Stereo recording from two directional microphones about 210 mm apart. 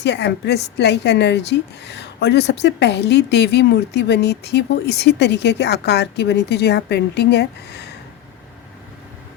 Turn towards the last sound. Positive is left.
turn(degrees=55)  # may be behind; listen again after turning